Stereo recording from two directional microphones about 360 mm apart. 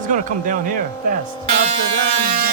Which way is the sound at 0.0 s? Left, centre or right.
Right.